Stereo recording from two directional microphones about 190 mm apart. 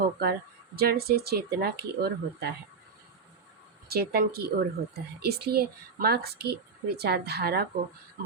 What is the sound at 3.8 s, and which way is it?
Speech, 55° right (ahead or behind).